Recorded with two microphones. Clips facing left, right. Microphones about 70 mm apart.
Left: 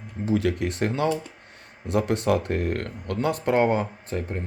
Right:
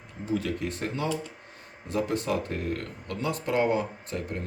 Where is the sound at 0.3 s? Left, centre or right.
Left.